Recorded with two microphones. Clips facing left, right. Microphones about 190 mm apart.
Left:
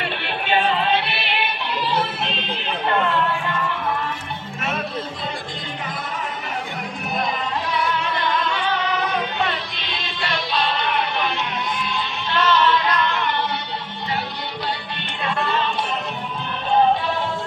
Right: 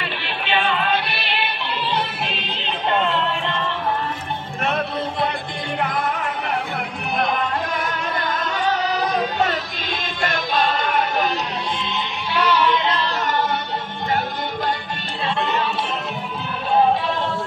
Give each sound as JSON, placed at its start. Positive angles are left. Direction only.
{"t": 0.5, "sound": "music", "side_deg": 35}
{"t": 2.6, "sound": "a sound", "side_deg": -20}
{"t": 5.8, "sound": "music", "side_deg": -65}
{"t": 12.3, "sound": "music", "side_deg": -10}
{"t": 12.8, "sound": "music", "side_deg": -30}